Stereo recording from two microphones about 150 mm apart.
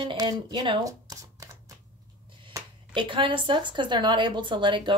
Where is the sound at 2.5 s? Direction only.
30° right (ahead or behind).